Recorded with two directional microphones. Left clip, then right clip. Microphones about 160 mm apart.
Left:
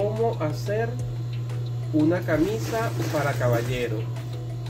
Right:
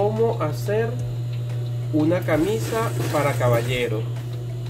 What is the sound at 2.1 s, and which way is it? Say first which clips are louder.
Speech: right 5 dB; 35° right (ahead or behind).